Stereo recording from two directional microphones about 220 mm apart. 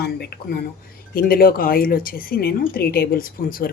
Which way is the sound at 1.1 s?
40° left (ahead or behind).